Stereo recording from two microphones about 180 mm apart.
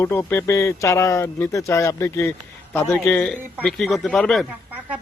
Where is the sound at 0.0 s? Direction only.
15° left (ahead or behind).